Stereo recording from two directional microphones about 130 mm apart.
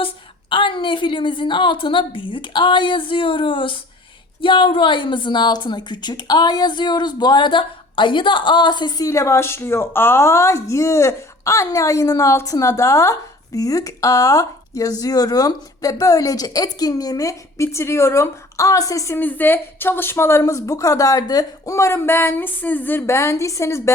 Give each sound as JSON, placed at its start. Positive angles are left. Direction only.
{"t": 0.5, "sound": "a woman's voice", "side_deg": 40}
{"t": 9.0, "sound": "speech", "side_deg": 20}